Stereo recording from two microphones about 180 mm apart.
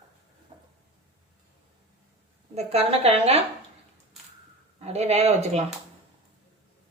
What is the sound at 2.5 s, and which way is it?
Speech, 35° right (ahead or behind).